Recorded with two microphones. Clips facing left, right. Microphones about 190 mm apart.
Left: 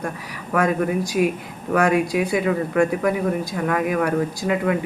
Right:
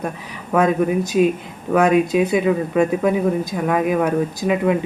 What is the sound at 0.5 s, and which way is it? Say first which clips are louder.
Speech: right 3 dB; 20° right (ahead or behind).